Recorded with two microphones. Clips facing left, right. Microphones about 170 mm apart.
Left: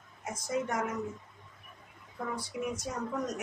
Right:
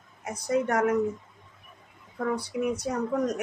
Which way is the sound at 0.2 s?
65° right (ahead or behind).